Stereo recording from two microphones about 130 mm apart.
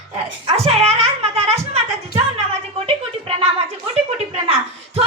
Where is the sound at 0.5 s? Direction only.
50° right (ahead or behind).